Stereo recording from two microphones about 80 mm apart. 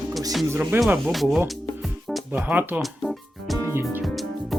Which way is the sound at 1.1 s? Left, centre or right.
Centre.